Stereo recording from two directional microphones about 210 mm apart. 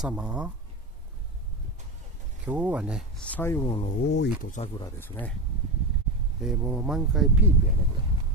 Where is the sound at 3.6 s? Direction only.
25° left (ahead or behind).